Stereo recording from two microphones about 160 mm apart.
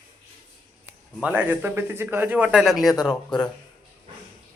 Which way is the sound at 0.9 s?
10° right (ahead or behind).